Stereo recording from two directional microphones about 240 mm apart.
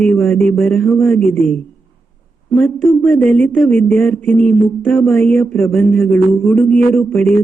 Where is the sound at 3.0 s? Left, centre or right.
Centre.